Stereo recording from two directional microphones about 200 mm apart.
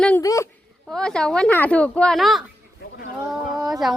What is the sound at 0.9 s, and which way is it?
Speech, 5° left (ahead or behind).